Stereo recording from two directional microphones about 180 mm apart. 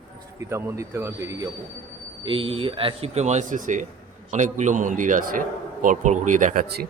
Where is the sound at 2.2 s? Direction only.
30° right (ahead or behind).